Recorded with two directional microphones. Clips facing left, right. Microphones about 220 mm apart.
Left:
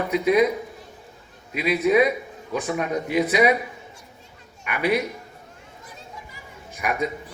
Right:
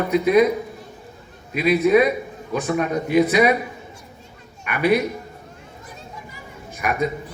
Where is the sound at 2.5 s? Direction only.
15° left (ahead or behind).